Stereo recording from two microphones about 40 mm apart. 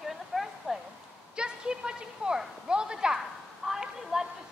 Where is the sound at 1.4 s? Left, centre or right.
Right.